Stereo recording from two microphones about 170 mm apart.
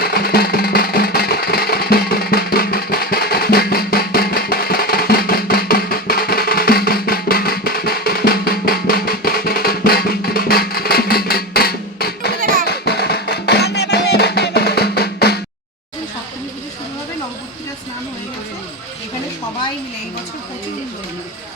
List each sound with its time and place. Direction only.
0.0 s music: 65° left (ahead or behind)